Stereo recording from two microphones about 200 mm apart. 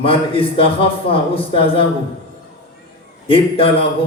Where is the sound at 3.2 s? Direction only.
25° left (ahead or behind).